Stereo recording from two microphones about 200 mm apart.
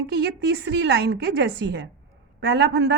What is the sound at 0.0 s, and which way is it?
A woman's voice, 60° right (ahead or behind).